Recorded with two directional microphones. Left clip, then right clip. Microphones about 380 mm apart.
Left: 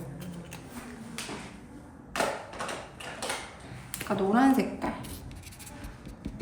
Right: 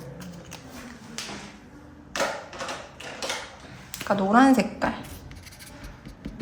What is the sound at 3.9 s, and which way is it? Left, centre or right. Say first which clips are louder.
Speech: right 6 dB; centre.